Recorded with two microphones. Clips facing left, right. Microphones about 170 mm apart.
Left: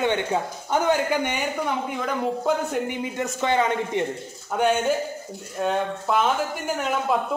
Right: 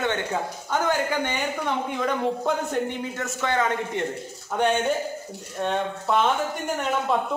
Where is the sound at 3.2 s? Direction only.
20° left (ahead or behind).